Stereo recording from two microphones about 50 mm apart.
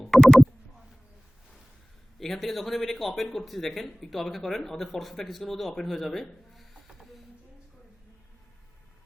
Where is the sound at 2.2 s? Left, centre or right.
Centre.